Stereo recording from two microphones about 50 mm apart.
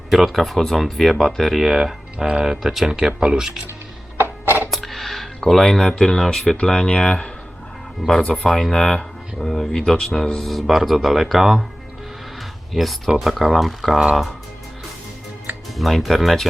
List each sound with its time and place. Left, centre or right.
0.1 s speech: centre
2.1 s speech: centre
4.2 s music: right
4.7 s speech: centre
6.6 s speech: centre
8.0 s speech: centre
8.4 s speech: centre
12.4 s a sound: centre
13.1 s speech: centre
15.7 s speech: centre